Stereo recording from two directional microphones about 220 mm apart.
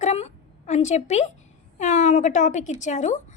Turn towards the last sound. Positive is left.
turn(degrees=35)  # may be behind; listen again after turning